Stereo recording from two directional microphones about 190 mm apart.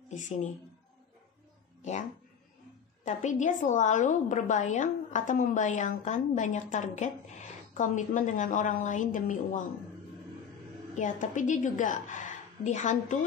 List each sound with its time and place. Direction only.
0.1 s speech: 40° left (ahead or behind)
1.8 s speech: 40° left (ahead or behind)
3.1 s a woman's voice: 40° left (ahead or behind)
11.0 s a woman's voice: 40° left (ahead or behind)